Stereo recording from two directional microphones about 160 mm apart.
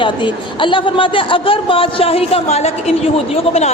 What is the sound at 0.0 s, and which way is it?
A woman's voice, 30° left (ahead or behind).